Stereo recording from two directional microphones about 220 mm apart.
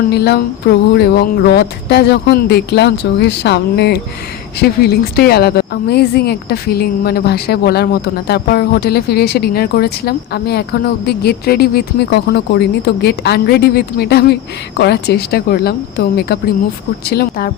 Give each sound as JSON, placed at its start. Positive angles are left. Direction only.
{"t": 0.1, "sound": "a woman's voice", "side_deg": 45}